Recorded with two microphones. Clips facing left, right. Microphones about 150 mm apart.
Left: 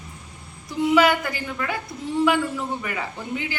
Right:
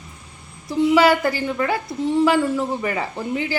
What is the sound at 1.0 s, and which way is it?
Speech, 35° right (ahead or behind).